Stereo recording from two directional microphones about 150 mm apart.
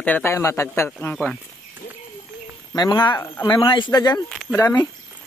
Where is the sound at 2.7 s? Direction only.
30° left (ahead or behind).